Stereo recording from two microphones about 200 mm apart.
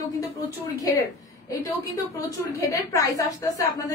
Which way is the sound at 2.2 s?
15° left (ahead or behind).